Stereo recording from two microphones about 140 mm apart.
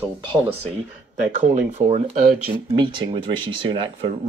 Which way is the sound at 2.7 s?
35° right (ahead or behind).